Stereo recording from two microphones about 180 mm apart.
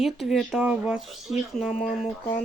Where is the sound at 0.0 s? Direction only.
Centre (ahead or behind).